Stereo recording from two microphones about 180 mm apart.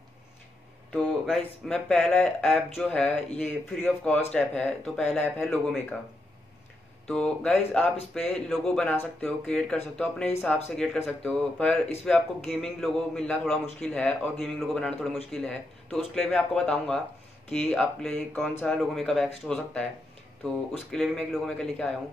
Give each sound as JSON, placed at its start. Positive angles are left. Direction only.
{"t": 1.2, "sound": "speech", "side_deg": 0}
{"t": 7.1, "sound": "speech", "side_deg": 5}
{"t": 18.8, "sound": "speech", "side_deg": 0}
{"t": 20.9, "sound": "speech", "side_deg": 5}